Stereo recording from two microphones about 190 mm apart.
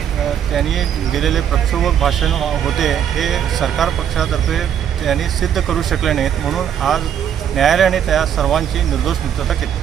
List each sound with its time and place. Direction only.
0.5 s speech: centre (ahead or behind)